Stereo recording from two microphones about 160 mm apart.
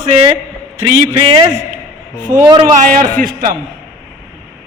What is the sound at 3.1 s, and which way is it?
Speech, 60° right (ahead or behind).